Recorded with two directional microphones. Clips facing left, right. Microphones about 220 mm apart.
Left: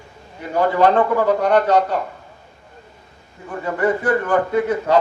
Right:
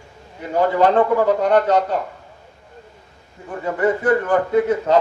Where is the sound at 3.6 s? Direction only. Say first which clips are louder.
Right 1 dB; 20° right (ahead or behind).